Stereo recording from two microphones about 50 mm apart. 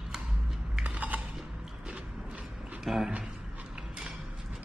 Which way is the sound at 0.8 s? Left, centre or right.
Right.